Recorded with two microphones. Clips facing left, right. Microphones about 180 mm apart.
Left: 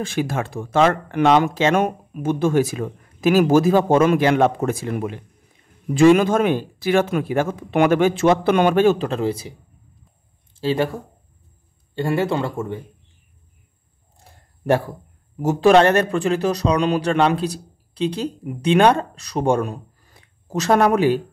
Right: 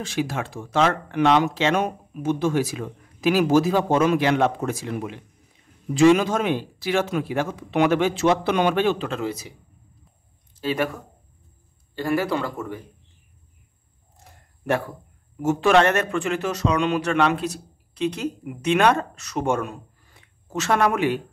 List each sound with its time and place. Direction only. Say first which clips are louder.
0.0 s speech: left 3 dB; 50° left (ahead or behind); by 9.5 s 30° left (ahead or behind)
10.5 s speech: left 4 dB; 30° left (ahead or behind)
11.9 s speech: left 2 dB; 25° left (ahead or behind)
14.1 s a sound: even; 35° left (ahead or behind)
15.3 s speech: left 4 dB; 35° left (ahead or behind)